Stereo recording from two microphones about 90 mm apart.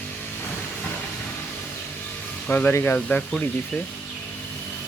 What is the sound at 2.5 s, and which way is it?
Speech, 20° left (ahead or behind).